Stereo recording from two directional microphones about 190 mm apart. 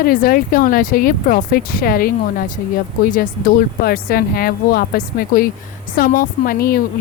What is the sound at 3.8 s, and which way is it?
Speech, 50° left (ahead or behind).